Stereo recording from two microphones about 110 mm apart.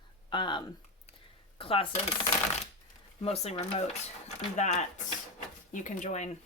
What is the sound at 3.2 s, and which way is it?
Speech, 70° left (ahead or behind).